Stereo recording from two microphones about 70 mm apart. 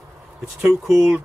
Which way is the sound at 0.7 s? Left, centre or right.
Centre.